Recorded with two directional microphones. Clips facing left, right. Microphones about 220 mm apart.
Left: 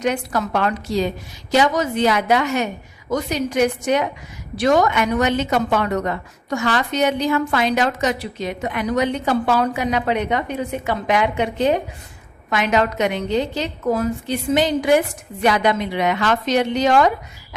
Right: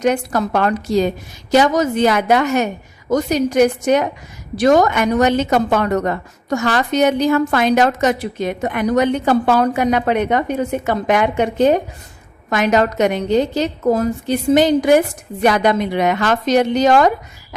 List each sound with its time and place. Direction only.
0.0 s a woman's voice: 45° right (ahead or behind)